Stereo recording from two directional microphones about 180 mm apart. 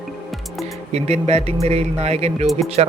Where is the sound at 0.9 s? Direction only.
35° right (ahead or behind).